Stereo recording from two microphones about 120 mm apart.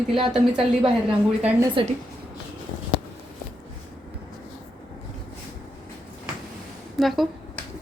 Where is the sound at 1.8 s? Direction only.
45° right (ahead or behind).